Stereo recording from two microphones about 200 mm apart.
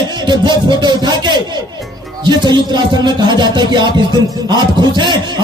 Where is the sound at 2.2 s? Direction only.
20° right (ahead or behind).